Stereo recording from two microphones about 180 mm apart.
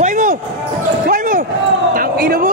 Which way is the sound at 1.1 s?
45° right (ahead or behind).